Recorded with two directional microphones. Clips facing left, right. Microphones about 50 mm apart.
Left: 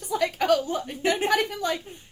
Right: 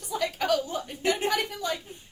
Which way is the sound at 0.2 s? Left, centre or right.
Left.